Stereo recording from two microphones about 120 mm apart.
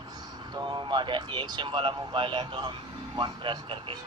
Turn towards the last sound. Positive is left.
turn(degrees=-45)  # may be behind; listen again after turning